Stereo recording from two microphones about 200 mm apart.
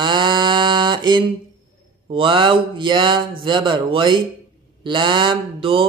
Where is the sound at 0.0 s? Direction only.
25° right (ahead or behind).